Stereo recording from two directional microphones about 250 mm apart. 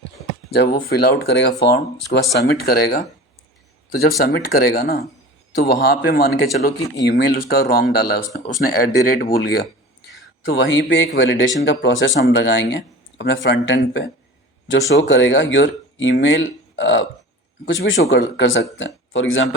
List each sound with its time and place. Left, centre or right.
0.7 s a man's voice: left
4.2 s a man's voice: left
10.4 s speech: left